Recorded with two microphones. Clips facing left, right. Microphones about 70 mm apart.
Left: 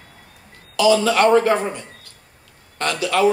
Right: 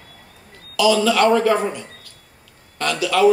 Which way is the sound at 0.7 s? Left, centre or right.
Left.